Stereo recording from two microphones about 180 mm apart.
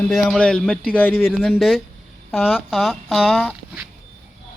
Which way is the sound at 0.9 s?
5° left (ahead or behind).